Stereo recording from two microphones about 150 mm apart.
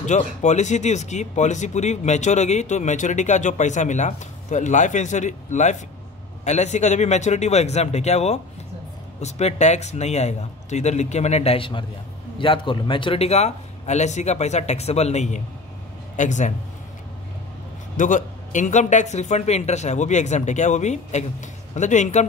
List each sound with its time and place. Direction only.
0.0 s speech: 50° left (ahead or behind)
17.9 s speech: 60° left (ahead or behind)